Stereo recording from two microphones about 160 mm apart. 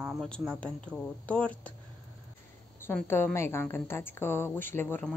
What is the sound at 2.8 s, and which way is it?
A woman's voice, 15° left (ahead or behind).